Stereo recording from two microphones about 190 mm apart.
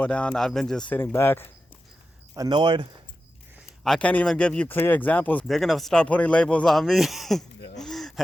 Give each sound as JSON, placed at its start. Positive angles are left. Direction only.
{"t": 0.0, "sound": "speech", "side_deg": 5}
{"t": 2.3, "sound": "speech", "side_deg": -20}
{"t": 3.8, "sound": "speech", "side_deg": 5}
{"t": 7.8, "sound": "a sound", "side_deg": 0}